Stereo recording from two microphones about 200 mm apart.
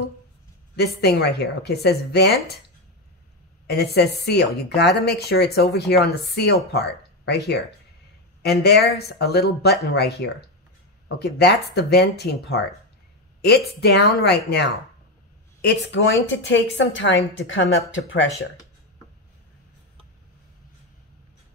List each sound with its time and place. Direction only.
0.7 s a woman's voice: 55° left (ahead or behind)
3.6 s a woman's voice: 55° left (ahead or behind)